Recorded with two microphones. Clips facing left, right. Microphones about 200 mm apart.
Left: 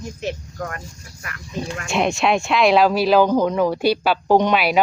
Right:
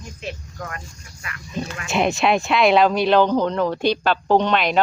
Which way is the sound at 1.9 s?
Centre (ahead or behind).